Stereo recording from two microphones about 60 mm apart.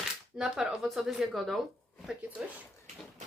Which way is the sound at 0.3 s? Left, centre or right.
Centre.